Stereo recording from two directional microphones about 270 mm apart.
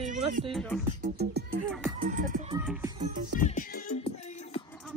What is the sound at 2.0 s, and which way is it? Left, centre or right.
Music, right.